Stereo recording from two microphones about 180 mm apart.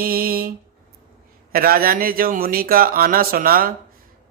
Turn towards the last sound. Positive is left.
turn(degrees=-55)  # may be behind; listen again after turning